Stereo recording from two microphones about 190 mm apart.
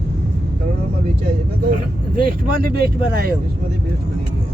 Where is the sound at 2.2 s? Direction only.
50° right (ahead or behind).